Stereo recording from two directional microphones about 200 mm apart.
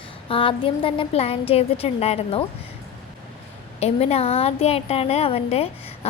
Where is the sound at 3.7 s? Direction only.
30° left (ahead or behind).